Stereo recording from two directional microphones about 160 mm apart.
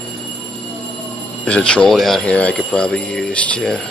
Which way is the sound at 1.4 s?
5° left (ahead or behind).